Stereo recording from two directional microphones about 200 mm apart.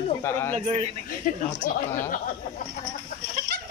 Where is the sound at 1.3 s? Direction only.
45° left (ahead or behind).